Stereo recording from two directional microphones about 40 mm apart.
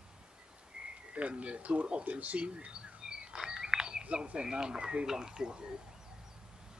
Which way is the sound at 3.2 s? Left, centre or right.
Centre.